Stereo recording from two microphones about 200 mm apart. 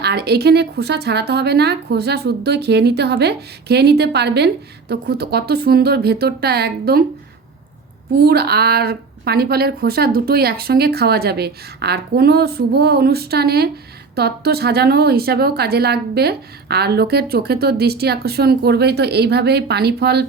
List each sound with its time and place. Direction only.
0.0 s speech: 55° right (ahead or behind)
8.1 s a woman's voice: 55° right (ahead or behind)